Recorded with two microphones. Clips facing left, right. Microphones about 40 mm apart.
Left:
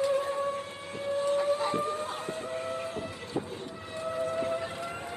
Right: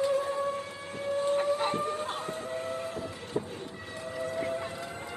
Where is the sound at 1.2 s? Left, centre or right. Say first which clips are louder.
Even; right.